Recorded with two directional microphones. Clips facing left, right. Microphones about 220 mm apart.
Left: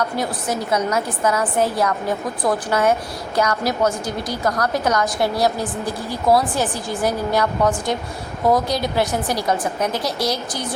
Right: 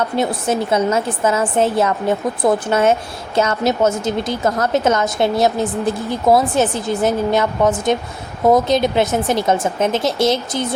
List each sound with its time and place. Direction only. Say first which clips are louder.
0.2 s a woman's voice: right 5 dB; 25° right (ahead or behind)